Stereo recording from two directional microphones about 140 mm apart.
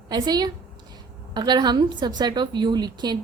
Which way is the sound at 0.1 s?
30° right (ahead or behind).